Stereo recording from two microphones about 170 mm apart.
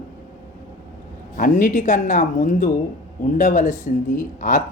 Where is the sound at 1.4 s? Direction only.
55° left (ahead or behind).